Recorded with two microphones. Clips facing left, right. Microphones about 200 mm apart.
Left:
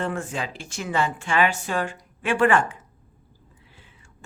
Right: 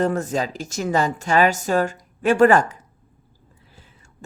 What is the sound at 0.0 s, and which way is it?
Speech, 40° right (ahead or behind).